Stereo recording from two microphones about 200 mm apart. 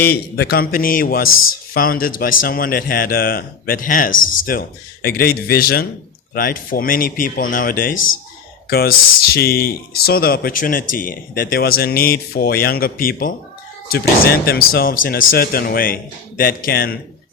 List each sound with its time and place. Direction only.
0.0 s speech: 50° left (ahead or behind)
14.4 s speech: 50° left (ahead or behind)